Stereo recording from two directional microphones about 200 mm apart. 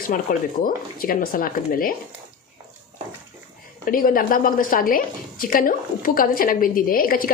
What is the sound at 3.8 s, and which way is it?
A woman's voice, 45° left (ahead or behind).